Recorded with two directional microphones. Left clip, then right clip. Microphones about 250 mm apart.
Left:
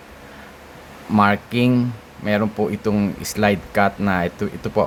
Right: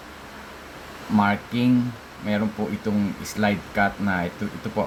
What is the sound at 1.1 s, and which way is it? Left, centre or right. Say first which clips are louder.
Speech: left 5 dB; left.